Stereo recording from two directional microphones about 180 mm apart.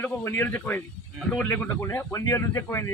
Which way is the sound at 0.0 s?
10° left (ahead or behind).